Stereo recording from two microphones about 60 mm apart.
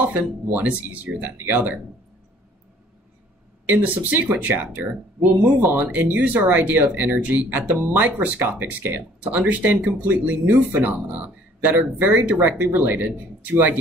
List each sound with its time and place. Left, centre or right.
0.0 s speech: right
3.6 s speech: right